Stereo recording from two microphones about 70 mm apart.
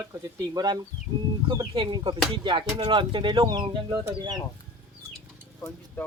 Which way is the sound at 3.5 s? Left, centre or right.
Right.